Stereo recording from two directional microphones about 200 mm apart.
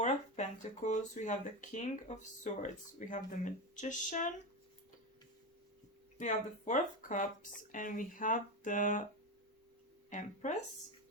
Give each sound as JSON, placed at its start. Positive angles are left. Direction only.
{"t": 0.0, "sound": "speech", "side_deg": 35}
{"t": 6.1, "sound": "speech", "side_deg": 35}
{"t": 10.1, "sound": "speech", "side_deg": 40}